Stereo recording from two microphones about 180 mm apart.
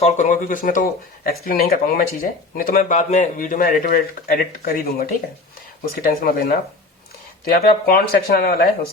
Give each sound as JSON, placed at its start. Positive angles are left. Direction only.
{"t": 0.0, "sound": "speech", "side_deg": 40}
{"t": 7.5, "sound": "speech", "side_deg": 60}